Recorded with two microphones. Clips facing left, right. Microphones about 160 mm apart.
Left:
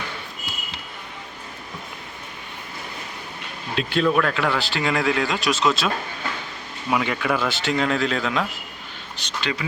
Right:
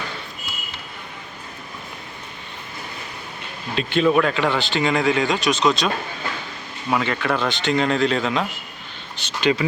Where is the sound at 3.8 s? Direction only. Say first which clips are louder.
Right 3 dB; centre (ahead or behind).